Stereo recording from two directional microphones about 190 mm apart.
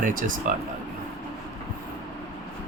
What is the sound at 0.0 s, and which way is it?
Speech, 45° right (ahead or behind).